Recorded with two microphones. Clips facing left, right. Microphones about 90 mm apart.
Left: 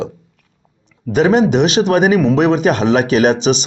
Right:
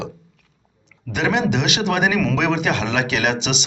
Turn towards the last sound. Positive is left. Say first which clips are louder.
# left 9 dB
turn(degrees=40)  # may be behind; listen again after turning